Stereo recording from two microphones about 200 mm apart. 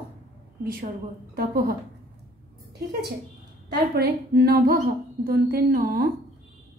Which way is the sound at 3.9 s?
50° right (ahead or behind).